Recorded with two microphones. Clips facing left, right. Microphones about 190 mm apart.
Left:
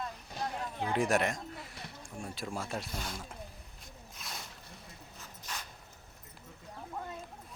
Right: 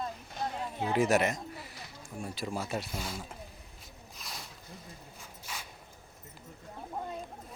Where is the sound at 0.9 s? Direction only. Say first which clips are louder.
Right 3 dB; centre (ahead or behind).